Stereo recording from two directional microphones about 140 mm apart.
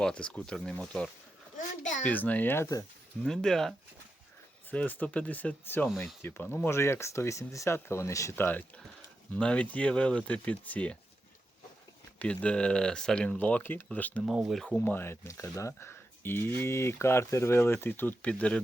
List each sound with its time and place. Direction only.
0.0 s speech: 5° left (ahead or behind)
1.5 s a sound: 60° left (ahead or behind)
2.0 s speech: 10° left (ahead or behind)
3.2 s speech: 5° left (ahead or behind)
12.2 s speech: 10° left (ahead or behind)
14.3 s speech: 5° right (ahead or behind)